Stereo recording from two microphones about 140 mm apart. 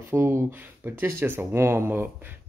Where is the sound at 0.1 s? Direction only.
20° right (ahead or behind).